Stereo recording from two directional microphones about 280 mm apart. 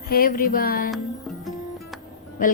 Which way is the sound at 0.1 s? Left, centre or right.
Left.